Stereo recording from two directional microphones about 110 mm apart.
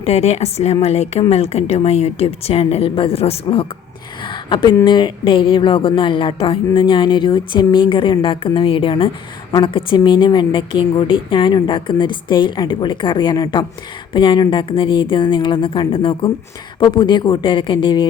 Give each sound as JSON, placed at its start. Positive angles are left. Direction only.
{"t": 0.0, "sound": "a woman's voice", "side_deg": 70}
{"t": 4.3, "sound": "a sound", "side_deg": 45}
{"t": 4.9, "sound": "a woman's voice", "side_deg": 45}